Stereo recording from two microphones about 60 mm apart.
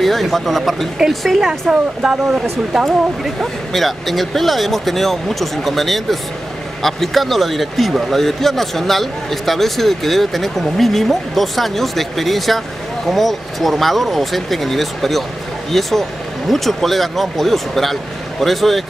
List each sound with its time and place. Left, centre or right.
0.0 s a man's voice: centre